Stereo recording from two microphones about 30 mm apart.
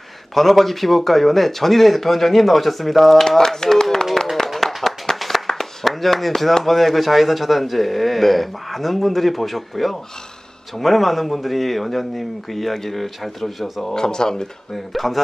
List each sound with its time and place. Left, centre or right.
0.3 s speech: centre
3.3 s speech: centre
3.8 s clapping: centre
5.5 s a sound: centre
5.9 s speech: centre
13.9 s speech: left
14.7 s speech: centre